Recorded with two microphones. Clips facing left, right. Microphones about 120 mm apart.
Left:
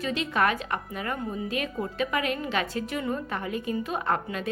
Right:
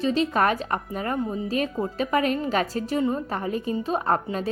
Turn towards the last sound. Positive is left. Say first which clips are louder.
# right 4 dB
turn(degrees=-35)  # may be behind; listen again after turning